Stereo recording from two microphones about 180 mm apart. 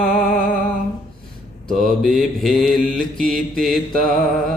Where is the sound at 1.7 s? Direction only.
Centre (ahead or behind).